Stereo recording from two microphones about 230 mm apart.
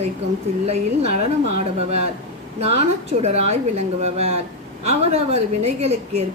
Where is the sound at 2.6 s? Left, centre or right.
Right.